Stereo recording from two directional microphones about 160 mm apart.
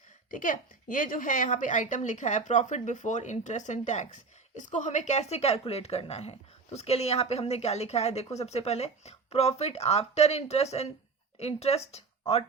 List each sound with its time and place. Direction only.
0.3 s a woman's voice: 55° left (ahead or behind); by 12.0 s 40° left (ahead or behind)